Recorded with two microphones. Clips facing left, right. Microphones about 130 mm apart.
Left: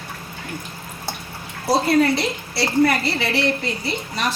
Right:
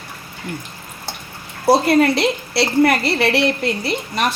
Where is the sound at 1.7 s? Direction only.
65° right (ahead or behind).